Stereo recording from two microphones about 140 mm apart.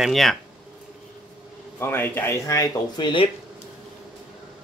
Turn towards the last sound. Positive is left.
turn(degrees=35)  # may be behind; listen again after turning